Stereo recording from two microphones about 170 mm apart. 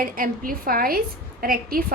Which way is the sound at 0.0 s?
55° right (ahead or behind).